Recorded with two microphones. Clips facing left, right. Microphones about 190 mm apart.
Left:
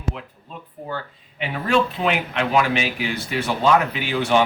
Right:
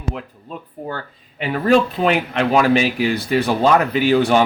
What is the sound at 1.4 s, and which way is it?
Speech, 40° right (ahead or behind).